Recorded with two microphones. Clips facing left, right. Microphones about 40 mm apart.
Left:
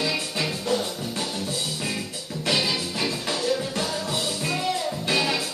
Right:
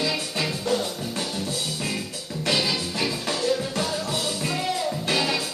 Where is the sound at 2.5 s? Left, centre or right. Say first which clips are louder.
Even; centre.